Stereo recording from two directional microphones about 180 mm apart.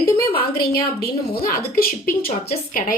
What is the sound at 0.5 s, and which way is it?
A woman's voice, 60° left (ahead or behind).